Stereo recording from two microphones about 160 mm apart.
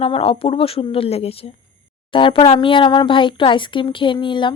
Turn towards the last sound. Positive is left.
turn(degrees=30)  # may be behind; listen again after turning